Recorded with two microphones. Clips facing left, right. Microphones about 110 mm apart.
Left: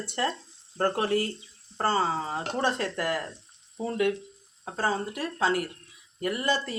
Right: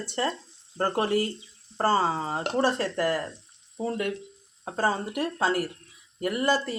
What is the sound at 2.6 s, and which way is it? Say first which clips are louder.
Speech: right 1 dB; centre (ahead or behind).